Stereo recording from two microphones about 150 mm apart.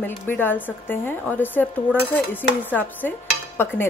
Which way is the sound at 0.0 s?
15° left (ahead or behind).